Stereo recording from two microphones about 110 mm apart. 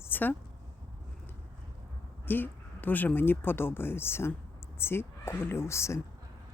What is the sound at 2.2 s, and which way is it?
Speech, 15° left (ahead or behind).